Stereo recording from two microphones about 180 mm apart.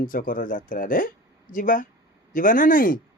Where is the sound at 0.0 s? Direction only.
50° left (ahead or behind).